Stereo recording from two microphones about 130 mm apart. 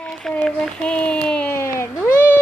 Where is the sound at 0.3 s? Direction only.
5° left (ahead or behind).